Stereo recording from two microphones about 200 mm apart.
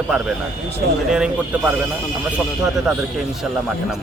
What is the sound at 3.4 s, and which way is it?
Speech, centre (ahead or behind).